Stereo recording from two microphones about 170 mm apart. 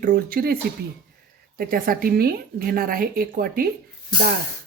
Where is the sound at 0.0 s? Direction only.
55° right (ahead or behind).